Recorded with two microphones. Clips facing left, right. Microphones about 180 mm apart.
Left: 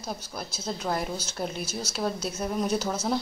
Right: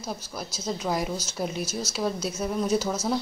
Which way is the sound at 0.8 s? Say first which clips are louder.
Right 1 dB; 10° right (ahead or behind).